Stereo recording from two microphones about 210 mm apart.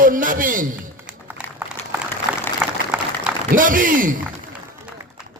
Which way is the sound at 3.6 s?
40° right (ahead or behind).